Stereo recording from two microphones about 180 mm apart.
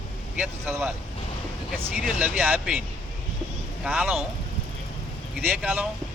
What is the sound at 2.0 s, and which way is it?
Speech, 5° right (ahead or behind).